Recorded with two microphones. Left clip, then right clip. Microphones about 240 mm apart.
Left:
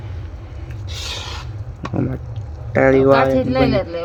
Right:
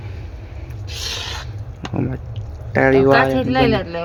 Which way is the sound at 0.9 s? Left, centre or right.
Centre.